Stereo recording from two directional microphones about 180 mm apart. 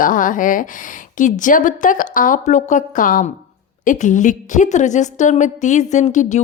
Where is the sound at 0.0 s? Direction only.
50° left (ahead or behind).